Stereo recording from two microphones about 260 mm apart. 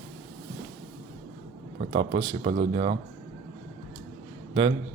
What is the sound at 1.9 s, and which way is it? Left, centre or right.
Speech, centre.